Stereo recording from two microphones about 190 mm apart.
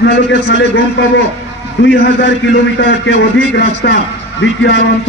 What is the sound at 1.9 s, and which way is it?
A man's voice, 65° left (ahead or behind).